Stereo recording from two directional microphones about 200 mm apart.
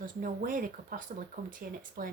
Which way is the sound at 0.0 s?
45° right (ahead or behind).